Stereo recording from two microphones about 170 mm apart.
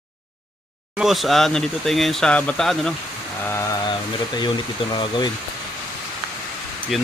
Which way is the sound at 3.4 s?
15° left (ahead or behind).